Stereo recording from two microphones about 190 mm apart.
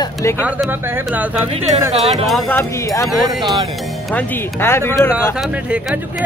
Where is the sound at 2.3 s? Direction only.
10° left (ahead or behind).